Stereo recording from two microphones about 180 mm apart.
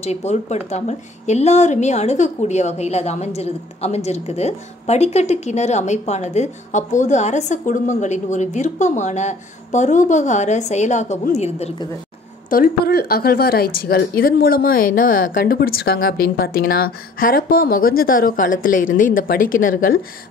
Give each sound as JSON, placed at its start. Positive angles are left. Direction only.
{"t": 0.0, "sound": "a woman's voice", "side_deg": 40}
{"t": 12.4, "sound": "a woman's voice", "side_deg": 55}